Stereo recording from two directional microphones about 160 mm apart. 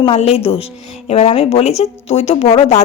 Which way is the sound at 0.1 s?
40° left (ahead or behind).